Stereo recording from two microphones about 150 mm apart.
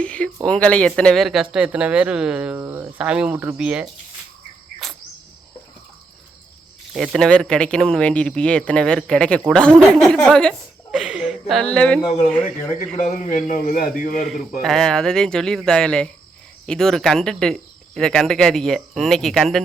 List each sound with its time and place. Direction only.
0.0 s a sound: 10° left (ahead or behind)
0.4 s speech: 10° left (ahead or behind)
4.8 s cricket: centre (ahead or behind)
6.9 s speech: centre (ahead or behind)
13.0 s a man's voice: 55° left (ahead or behind)
14.6 s speech: 5° left (ahead or behind)